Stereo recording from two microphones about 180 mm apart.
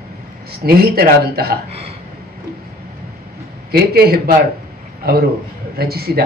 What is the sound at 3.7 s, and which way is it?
A man's voice, 60° right (ahead or behind).